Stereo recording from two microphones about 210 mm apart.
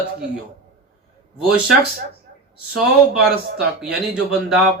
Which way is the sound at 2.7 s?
Centre (ahead or behind).